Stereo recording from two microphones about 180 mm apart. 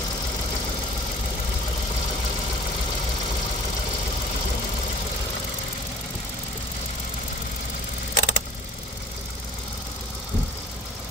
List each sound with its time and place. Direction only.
8.1 s vehicle: 90° left